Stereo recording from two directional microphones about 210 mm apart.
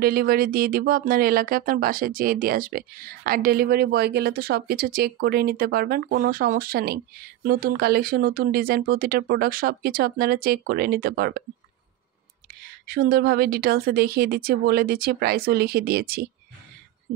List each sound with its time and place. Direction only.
0.0 s speech: 45° right (ahead or behind)
12.8 s speech: 45° right (ahead or behind)